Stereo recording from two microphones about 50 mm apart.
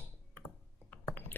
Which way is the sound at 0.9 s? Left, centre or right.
Left.